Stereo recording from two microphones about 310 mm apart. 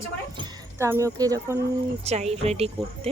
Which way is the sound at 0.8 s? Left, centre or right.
Centre.